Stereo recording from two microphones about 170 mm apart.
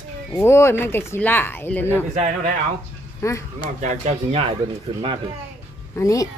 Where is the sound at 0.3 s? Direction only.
15° left (ahead or behind).